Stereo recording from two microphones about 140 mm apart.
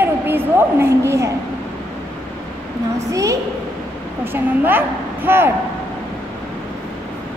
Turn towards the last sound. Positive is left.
turn(degrees=-15)  # may be behind; listen again after turning